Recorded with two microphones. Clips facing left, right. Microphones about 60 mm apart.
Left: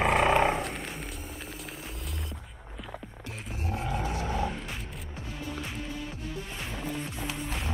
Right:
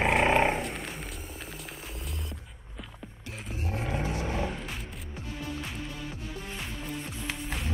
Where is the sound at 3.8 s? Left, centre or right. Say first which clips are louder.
Even; right.